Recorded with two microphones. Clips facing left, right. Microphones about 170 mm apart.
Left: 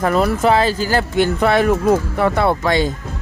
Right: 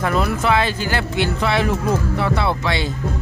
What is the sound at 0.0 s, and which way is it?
Speech, 40° left (ahead or behind).